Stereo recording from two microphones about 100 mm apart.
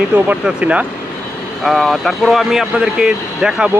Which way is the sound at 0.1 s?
15° right (ahead or behind).